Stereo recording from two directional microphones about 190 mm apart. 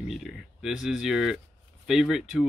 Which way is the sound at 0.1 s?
Centre (ahead or behind).